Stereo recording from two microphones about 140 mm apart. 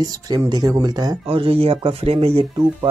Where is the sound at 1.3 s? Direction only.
40° right (ahead or behind).